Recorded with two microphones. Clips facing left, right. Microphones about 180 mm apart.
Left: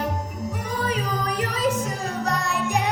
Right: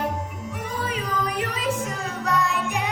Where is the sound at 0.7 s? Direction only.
40° left (ahead or behind).